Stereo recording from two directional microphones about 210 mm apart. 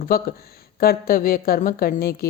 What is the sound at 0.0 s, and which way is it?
Speech, 45° left (ahead or behind).